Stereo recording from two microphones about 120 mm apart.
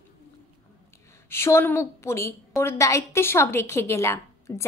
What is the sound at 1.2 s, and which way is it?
A woman's voice, 20° left (ahead or behind).